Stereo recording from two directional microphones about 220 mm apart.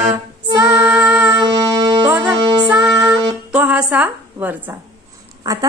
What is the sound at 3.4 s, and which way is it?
A woman's voice, 5° right (ahead or behind).